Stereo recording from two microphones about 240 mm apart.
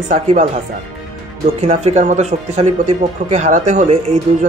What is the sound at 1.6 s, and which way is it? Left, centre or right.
Speech, right.